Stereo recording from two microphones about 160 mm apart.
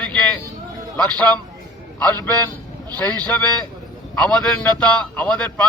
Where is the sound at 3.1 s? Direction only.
10° left (ahead or behind).